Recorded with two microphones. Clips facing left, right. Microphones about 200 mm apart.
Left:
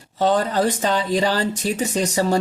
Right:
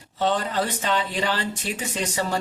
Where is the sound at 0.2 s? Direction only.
40° left (ahead or behind).